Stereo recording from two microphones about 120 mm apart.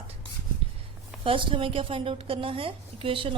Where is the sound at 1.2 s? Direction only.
45° right (ahead or behind).